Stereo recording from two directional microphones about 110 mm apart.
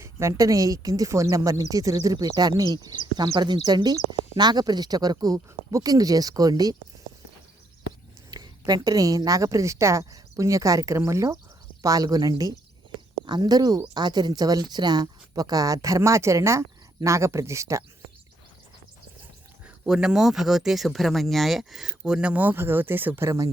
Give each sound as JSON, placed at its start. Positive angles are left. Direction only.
{"t": 0.0, "sound": "speech", "side_deg": -25}
{"t": 8.3, "sound": "a woman's voice", "side_deg": -40}
{"t": 19.6, "sound": "speech", "side_deg": -5}